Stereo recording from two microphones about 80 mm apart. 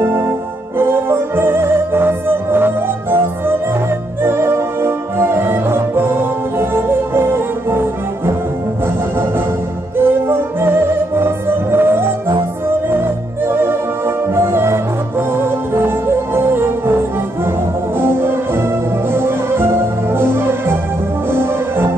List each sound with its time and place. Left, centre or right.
0.0 s music: right
9.9 s music: right